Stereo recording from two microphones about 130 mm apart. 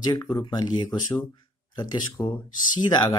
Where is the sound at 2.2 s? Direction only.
10° left (ahead or behind).